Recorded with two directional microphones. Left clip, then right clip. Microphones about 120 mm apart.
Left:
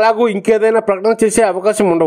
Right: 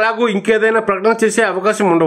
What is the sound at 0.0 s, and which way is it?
A man's voice, 40° left (ahead or behind).